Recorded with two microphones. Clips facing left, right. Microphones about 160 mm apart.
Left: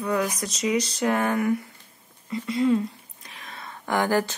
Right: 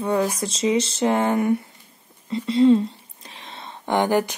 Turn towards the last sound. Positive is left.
turn(degrees=-20)  # may be behind; listen again after turning